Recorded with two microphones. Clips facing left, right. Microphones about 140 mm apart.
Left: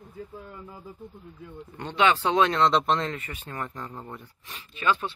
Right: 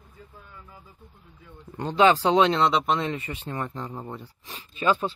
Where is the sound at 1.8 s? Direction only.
35° right (ahead or behind).